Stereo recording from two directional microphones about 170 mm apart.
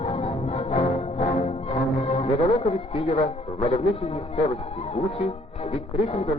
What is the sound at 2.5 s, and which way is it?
A man's voice, 35° left (ahead or behind).